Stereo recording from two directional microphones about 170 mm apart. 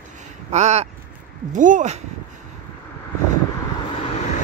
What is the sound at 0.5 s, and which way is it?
Speech, 40° right (ahead or behind).